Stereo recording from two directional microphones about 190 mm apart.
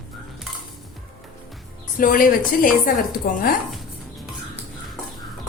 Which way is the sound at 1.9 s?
45° left (ahead or behind).